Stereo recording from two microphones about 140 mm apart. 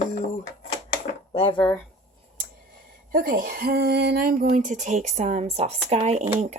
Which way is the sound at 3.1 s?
90° right.